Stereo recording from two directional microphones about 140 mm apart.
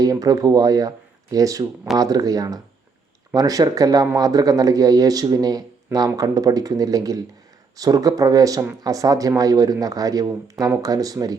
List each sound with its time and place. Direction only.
0.0 s speech: 25° right (ahead or behind)